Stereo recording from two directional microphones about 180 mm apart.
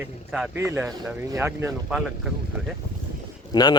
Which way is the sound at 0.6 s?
15° right (ahead or behind).